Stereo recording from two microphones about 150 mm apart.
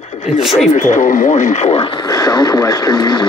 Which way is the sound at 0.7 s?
55° left (ahead or behind).